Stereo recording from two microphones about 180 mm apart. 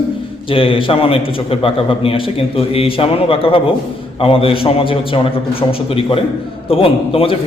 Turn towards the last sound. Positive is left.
turn(degrees=30)  # may be behind; listen again after turning